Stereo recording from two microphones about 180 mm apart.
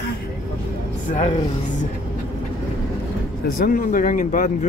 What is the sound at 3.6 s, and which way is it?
Speech, 50° left (ahead or behind).